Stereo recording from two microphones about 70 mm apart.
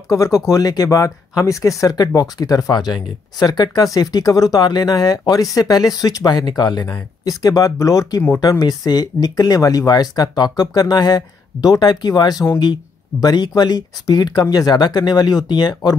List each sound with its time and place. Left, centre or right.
0.1 s speech: left
1.8 s speech: left
6.9 s speech: left
8.4 s speech: left
14.4 s speech: left